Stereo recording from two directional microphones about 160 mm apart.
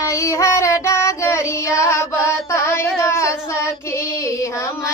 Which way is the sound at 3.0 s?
20° left (ahead or behind).